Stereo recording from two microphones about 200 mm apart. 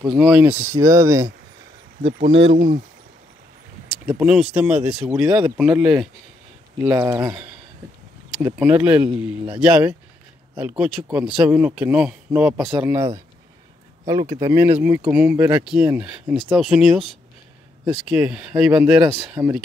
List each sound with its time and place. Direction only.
0.0 s speech: 5° right (ahead or behind)
2.0 s speech: 55° right (ahead or behind)
4.2 s speech: 5° right (ahead or behind)
18.0 s speech: 5° right (ahead or behind)
18.5 s speech: 15° right (ahead or behind)
18.8 s speech: centre (ahead or behind)